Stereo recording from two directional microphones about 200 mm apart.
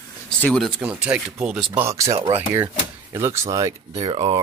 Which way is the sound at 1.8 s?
15° right (ahead or behind).